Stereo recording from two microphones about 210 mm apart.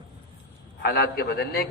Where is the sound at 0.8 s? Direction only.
50° left (ahead or behind).